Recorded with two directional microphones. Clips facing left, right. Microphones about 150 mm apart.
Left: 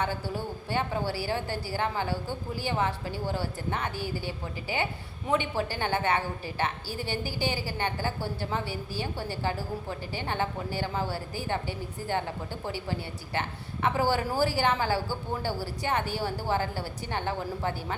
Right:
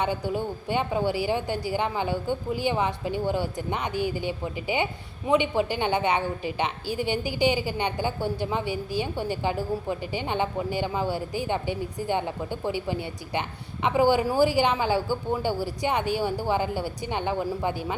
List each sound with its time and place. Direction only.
0.0 s a woman's voice: 15° right (ahead or behind)